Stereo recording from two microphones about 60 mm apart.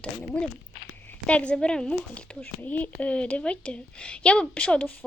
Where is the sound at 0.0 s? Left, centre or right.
Centre.